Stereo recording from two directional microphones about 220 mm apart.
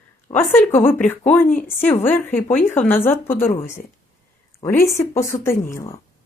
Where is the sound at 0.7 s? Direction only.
35° left (ahead or behind).